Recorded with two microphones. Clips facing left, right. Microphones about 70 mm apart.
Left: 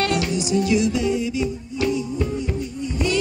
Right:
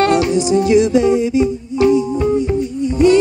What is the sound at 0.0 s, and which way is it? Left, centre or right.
Music, right.